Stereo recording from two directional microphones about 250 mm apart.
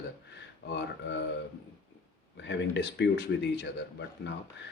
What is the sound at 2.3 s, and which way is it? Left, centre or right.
Speech, left.